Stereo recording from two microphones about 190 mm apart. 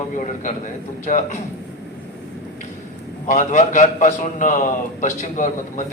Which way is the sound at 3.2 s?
40° left (ahead or behind).